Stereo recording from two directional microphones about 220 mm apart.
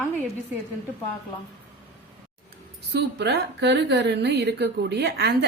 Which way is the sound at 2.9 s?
50° right (ahead or behind).